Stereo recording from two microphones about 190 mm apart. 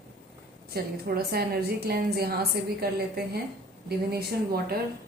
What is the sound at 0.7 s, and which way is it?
A woman's voice, 55° right (ahead or behind).